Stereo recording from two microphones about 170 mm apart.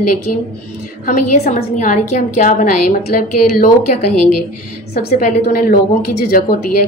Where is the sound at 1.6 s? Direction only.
50° left (ahead or behind).